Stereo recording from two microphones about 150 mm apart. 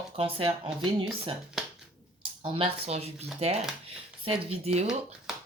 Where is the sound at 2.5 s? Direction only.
40° right (ahead or behind).